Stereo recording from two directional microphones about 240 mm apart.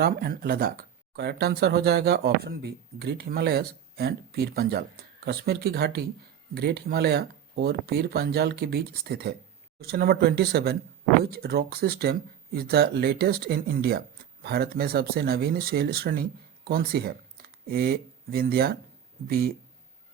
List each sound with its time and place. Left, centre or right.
0.0 s speech: right